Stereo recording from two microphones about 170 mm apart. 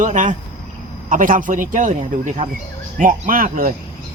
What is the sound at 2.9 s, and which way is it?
Speech, 50° right (ahead or behind).